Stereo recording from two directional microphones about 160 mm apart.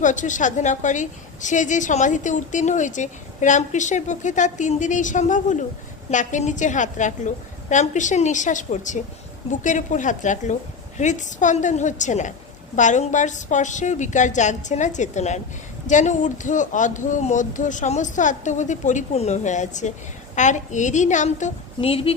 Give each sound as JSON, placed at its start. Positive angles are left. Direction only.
{"t": 0.0, "sound": "a woman's voice", "side_deg": 50}